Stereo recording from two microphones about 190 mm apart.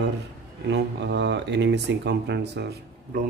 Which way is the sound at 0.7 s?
65° right (ahead or behind).